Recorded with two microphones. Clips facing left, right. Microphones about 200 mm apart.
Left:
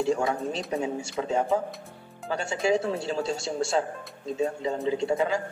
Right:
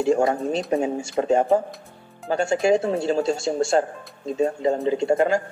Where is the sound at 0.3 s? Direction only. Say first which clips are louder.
Right 6 dB; 55° right (ahead or behind).